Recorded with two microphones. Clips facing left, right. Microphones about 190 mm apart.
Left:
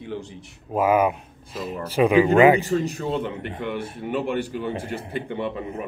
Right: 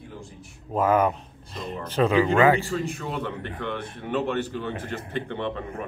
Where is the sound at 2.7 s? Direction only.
40° left (ahead or behind).